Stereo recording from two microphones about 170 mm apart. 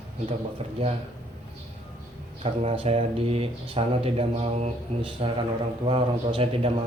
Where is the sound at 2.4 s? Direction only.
35° right (ahead or behind).